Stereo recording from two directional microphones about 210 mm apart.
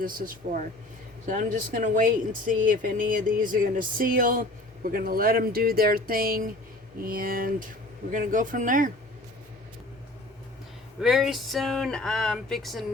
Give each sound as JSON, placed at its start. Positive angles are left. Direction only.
{"t": 0.0, "sound": "speech", "side_deg": -40}
{"t": 11.0, "sound": "speech", "side_deg": 0}